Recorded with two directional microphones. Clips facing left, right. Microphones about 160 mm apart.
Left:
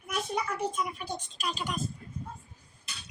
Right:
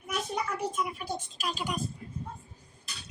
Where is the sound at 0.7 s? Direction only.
5° right (ahead or behind).